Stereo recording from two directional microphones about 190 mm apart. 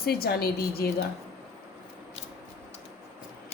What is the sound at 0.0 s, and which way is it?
A woman's voice, 55° left (ahead or behind).